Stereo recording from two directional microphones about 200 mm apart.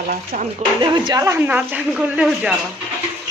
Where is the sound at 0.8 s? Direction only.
20° right (ahead or behind); by 2.6 s 5° right (ahead or behind).